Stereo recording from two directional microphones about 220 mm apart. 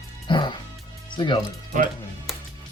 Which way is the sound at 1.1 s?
20° left (ahead or behind).